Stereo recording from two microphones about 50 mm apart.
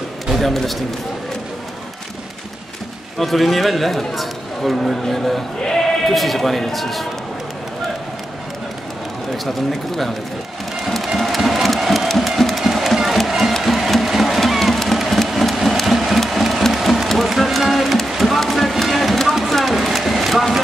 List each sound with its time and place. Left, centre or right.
0.3 s a man's voice: centre
3.2 s a man's voice: centre
9.4 s a man's voice: centre
11.1 s music: centre